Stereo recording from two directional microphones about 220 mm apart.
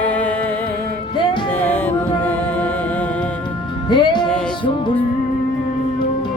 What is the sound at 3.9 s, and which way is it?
Music, 20° left (ahead or behind).